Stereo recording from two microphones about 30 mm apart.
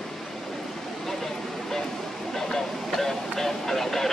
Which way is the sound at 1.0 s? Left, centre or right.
Centre.